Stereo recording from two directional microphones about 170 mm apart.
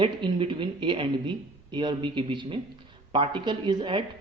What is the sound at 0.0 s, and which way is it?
A man's voice, 30° right (ahead or behind).